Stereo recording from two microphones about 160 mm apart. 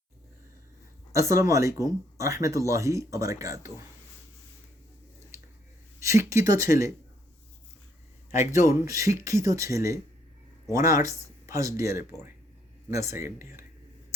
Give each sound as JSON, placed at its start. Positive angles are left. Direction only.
{"t": 1.1, "sound": "speech", "side_deg": -20}
{"t": 6.0, "sound": "speech", "side_deg": -20}
{"t": 8.6, "sound": "speech", "side_deg": -20}